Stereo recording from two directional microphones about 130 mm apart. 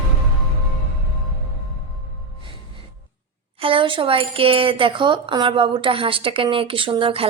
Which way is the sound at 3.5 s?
45° right (ahead or behind).